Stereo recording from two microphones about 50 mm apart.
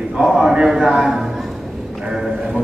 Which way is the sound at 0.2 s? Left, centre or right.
Centre.